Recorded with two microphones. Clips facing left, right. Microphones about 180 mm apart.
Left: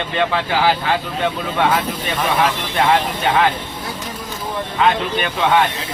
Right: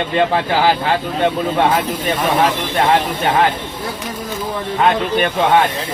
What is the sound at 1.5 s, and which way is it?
Speech, 45° right (ahead or behind).